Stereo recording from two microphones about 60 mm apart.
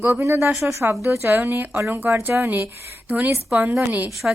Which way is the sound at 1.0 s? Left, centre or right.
Right.